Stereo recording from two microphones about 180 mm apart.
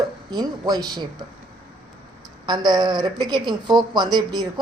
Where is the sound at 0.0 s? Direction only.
20° right (ahead or behind).